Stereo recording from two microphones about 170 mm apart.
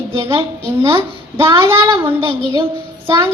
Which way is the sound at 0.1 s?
35° right (ahead or behind).